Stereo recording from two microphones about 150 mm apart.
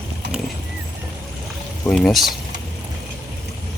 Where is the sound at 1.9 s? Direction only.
Centre (ahead or behind).